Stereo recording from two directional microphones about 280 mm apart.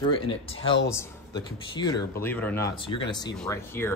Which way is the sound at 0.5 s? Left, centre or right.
Left.